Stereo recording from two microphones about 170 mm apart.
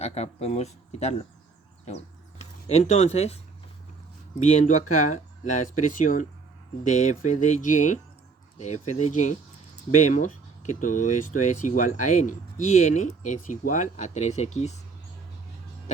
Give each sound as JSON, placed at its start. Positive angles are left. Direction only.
{"t": 0.0, "sound": "speech", "side_deg": 40}
{"t": 2.4, "sound": "speech", "side_deg": 40}